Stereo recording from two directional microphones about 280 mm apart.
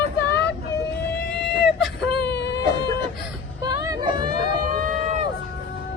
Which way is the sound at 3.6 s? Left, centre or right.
Centre.